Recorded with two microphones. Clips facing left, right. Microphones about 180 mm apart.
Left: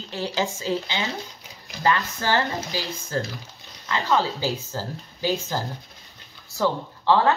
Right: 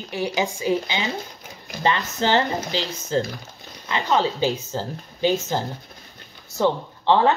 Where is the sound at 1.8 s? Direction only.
20° right (ahead or behind).